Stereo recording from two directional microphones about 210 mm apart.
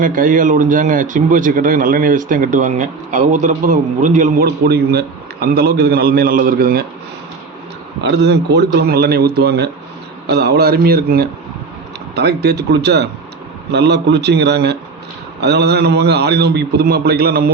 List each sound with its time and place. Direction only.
0.0 s a man's voice: 40° right (ahead or behind)
8.0 s a man's voice: 55° right (ahead or behind)